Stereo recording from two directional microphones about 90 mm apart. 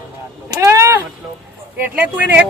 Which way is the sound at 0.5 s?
35° right (ahead or behind).